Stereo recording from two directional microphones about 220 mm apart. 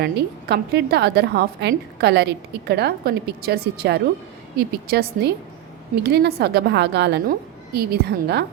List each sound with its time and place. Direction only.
0.0 s a woman's voice: 45° right (ahead or behind)